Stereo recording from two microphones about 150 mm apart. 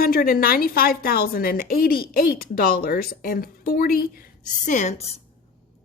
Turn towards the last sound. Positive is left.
turn(degrees=50)  # may be behind; listen again after turning